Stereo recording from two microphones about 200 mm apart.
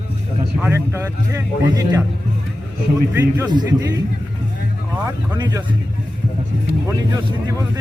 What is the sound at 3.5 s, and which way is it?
Speech, 20° right (ahead or behind).